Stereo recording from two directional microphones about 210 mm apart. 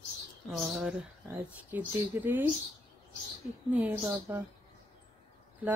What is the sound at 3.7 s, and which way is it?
Speech, 10° right (ahead or behind).